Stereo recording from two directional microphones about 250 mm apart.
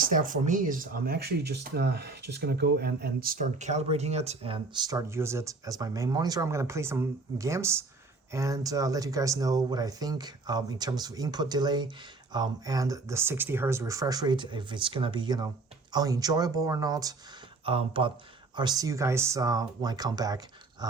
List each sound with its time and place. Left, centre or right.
0.0 s speech: right; by 20.4 s centre